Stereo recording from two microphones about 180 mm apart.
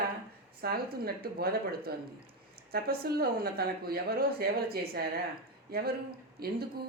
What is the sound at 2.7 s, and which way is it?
Speech, 60° right (ahead or behind).